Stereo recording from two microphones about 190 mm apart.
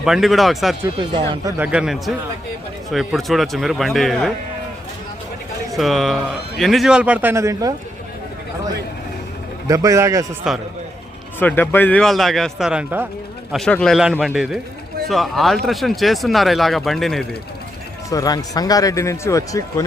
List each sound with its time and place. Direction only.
0.0 s speech: centre (ahead or behind)
0.9 s speech: 25° right (ahead or behind)
1.5 s speech: 5° right (ahead or behind)
5.7 s a man's voice: centre (ahead or behind); by 7.7 s 15° right (ahead or behind)
9.6 s a man's voice: 15° right (ahead or behind)
10.5 s speech: 5° right (ahead or behind)
11.3 s speech: 10° left (ahead or behind); by 13.1 s 5° right (ahead or behind)
13.5 s speech: 5° left (ahead or behind)
18.1 s speech: 20° left (ahead or behind)